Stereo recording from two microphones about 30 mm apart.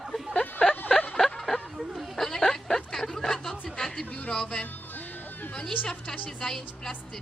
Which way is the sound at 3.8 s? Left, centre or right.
Centre.